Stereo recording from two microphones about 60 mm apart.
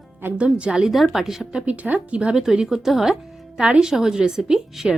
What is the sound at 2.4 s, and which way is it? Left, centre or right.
Speech, centre.